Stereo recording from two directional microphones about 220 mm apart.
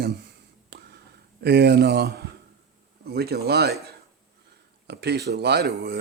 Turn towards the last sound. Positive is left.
turn(degrees=-50)  # may be behind; listen again after turning